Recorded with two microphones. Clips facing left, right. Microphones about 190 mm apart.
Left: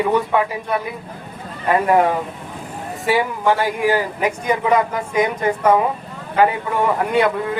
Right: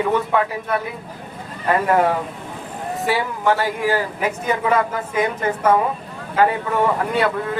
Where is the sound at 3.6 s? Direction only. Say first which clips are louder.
Left 2 dB; 15° left (ahead or behind).